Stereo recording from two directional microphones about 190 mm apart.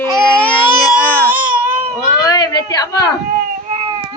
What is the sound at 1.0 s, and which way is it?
Baby cry, 10° left (ahead or behind).